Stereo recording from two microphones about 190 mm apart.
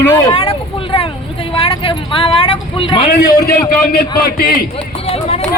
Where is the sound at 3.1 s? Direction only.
50° left (ahead or behind).